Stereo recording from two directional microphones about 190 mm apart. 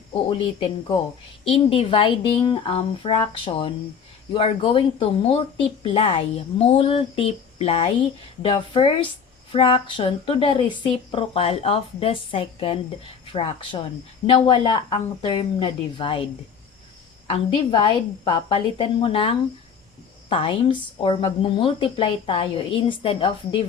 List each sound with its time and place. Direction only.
0.1 s speech: 30° left (ahead or behind)
17.2 s speech: 30° left (ahead or behind)